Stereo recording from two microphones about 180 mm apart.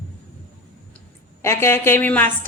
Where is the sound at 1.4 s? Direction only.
15° left (ahead or behind).